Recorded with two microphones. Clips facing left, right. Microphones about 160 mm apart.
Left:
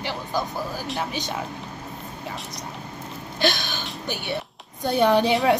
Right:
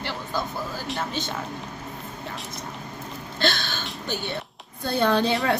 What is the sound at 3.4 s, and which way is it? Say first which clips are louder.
Speech: left 2 dB; 15° left (ahead or behind).